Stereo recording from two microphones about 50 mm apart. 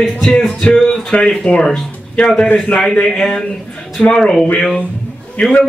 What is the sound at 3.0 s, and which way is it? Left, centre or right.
Speech, centre.